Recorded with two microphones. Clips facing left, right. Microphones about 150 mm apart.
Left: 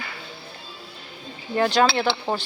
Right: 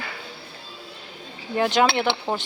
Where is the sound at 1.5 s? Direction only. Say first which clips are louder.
Left 1 dB; 15° right (ahead or behind).